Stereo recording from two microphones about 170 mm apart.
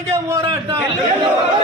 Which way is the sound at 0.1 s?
15° right (ahead or behind).